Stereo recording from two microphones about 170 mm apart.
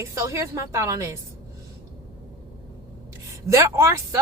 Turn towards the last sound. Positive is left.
turn(degrees=-15)  # may be behind; listen again after turning